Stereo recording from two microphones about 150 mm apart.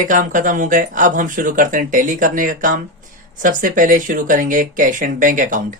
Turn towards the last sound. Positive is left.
turn(degrees=-60)  # may be behind; listen again after turning